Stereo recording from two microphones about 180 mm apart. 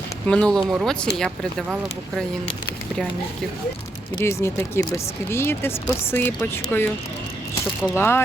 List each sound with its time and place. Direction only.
0.3 s speech: 5° left (ahead or behind)
4.2 s speech: 15° left (ahead or behind)
7.9 s speech: 10° left (ahead or behind)